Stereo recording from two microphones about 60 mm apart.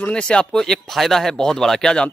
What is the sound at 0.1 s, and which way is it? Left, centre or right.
Speech, centre.